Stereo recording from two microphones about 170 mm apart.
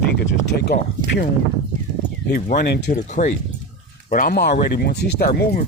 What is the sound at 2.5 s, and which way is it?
Speech, 75° left (ahead or behind).